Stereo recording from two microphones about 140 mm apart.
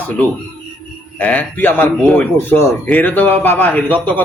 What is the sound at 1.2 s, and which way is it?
A man's voice, 10° left (ahead or behind).